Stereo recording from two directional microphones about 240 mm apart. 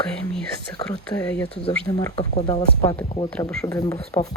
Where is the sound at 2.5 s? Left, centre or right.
Left.